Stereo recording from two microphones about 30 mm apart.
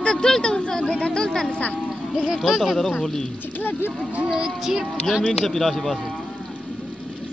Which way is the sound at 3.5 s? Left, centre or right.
Left.